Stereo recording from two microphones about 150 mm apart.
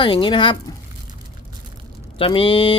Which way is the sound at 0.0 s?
35° left (ahead or behind).